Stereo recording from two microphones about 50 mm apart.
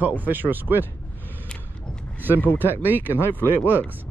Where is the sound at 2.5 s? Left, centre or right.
Right.